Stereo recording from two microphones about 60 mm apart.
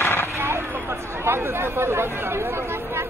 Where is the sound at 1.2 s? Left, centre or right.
Right.